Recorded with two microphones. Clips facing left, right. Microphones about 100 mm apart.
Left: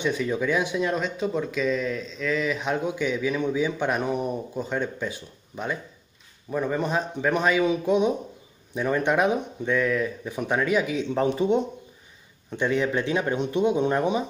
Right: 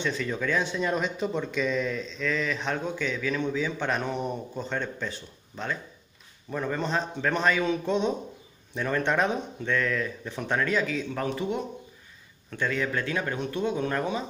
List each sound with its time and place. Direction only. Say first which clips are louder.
0.0 s speech: left 4 dB; 15° left (ahead or behind)
0.8 s speech: left 2 dB; centre (ahead or behind); by 14.2 s 20° left (ahead or behind)